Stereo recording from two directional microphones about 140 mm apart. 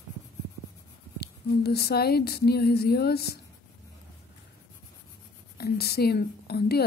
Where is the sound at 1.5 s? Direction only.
90° left.